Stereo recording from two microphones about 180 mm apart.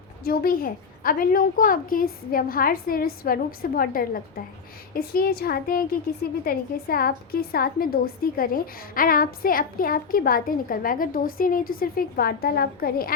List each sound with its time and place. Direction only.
0.3 s a woman's voice: 55° left (ahead or behind)